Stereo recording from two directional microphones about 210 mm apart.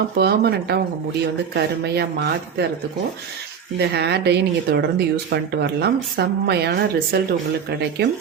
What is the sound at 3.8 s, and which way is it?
Speech, 50° right (ahead or behind).